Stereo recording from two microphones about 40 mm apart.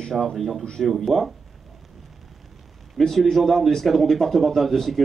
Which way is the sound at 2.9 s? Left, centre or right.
Centre.